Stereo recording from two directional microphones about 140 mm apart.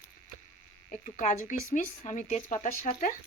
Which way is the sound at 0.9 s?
65° left (ahead or behind).